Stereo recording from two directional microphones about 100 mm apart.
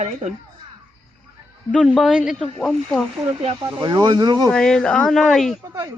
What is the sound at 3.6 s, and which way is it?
Speech, 45° right (ahead or behind).